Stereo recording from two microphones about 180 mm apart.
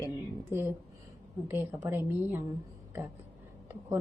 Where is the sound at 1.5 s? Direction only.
10° right (ahead or behind).